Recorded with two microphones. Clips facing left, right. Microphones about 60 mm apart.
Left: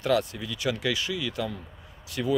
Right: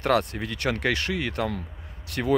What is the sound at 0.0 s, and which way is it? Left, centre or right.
Speech, right.